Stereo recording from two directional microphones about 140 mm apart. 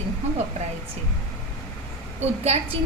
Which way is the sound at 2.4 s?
45° right (ahead or behind).